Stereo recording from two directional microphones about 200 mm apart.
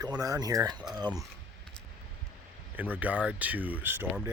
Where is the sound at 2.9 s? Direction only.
5° right (ahead or behind).